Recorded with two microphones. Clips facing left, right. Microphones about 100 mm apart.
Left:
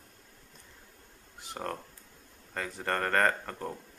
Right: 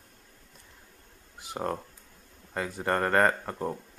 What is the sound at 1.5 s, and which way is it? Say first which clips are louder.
Speech: right 5 dB; 15° right (ahead or behind).